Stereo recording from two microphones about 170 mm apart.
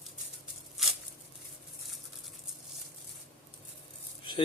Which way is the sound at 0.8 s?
Centre (ahead or behind).